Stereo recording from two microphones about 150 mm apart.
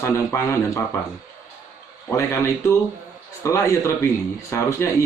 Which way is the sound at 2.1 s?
20° left (ahead or behind).